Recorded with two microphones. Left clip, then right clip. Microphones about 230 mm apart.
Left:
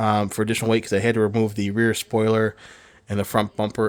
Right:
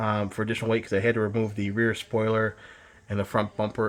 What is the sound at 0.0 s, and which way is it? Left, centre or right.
Speech, left.